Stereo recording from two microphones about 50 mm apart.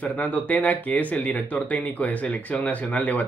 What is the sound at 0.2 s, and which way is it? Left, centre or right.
Speech, left.